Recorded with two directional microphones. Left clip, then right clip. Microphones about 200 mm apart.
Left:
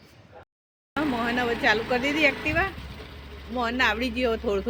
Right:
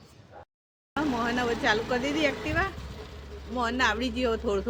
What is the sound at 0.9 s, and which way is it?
Speech, 10° left (ahead or behind).